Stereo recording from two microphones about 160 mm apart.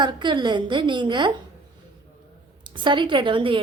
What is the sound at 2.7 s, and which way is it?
Speech, 30° right (ahead or behind).